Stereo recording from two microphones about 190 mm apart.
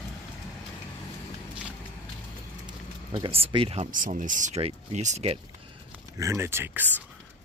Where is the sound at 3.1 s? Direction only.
30° right (ahead or behind).